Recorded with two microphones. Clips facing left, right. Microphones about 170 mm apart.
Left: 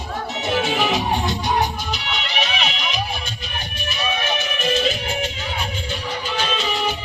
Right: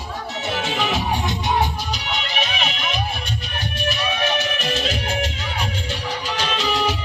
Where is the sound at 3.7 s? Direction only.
75° right (ahead or behind).